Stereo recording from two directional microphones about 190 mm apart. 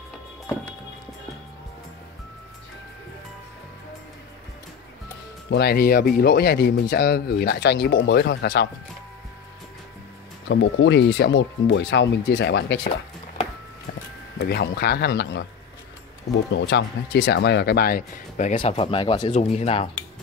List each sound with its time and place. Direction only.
5.5 s speech: 55° left (ahead or behind)
10.5 s speech: 70° left (ahead or behind)
14.4 s speech: 60° left (ahead or behind)
16.5 s speech: 65° left (ahead or behind); by 18.5 s 50° left (ahead or behind)
18.5 s speech: 30° left (ahead or behind)
19.3 s speech: 35° left (ahead or behind)